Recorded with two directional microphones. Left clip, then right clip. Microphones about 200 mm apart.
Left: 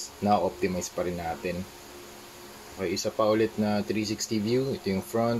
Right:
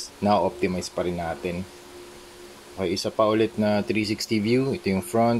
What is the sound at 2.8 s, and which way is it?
Speech, 30° right (ahead or behind).